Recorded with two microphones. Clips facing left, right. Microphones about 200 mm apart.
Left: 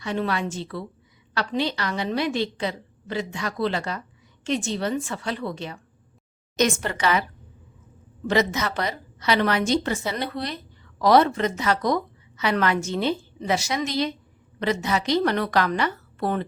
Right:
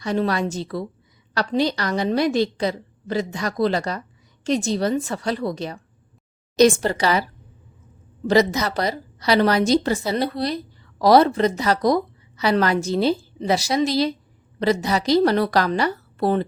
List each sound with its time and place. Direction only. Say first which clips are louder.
0.0 s a woman's voice: right 4 dB; 40° right (ahead or behind)
8.3 s a woman's voice: right 5 dB; 35° right (ahead or behind)